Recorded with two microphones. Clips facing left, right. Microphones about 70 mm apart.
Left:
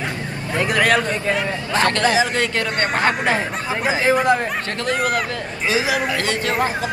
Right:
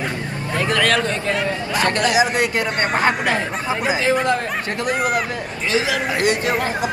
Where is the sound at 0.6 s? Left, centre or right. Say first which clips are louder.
Left 1 dB; centre.